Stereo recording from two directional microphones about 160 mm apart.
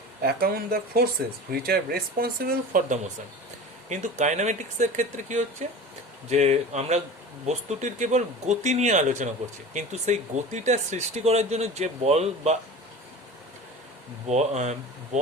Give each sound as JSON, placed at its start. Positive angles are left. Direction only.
{"t": 0.2, "sound": "speech", "side_deg": -70}
{"t": 3.8, "sound": "speech", "side_deg": -50}
{"t": 14.3, "sound": "speech", "side_deg": -45}